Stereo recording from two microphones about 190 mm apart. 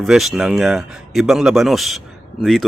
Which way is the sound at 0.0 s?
Centre (ahead or behind).